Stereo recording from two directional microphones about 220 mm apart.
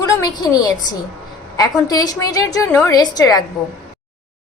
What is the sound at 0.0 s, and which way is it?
A woman's voice, 15° left (ahead or behind).